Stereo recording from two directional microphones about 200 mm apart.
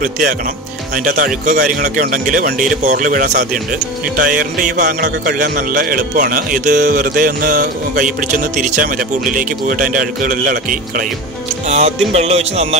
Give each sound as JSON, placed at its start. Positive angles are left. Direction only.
{"t": 0.0, "sound": "speech", "side_deg": -40}
{"t": 11.6, "sound": "speech", "side_deg": -35}